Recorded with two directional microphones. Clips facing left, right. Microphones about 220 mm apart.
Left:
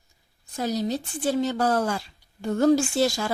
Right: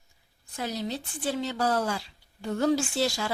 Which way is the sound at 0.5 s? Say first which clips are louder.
Left 6 dB; 40° left (ahead or behind).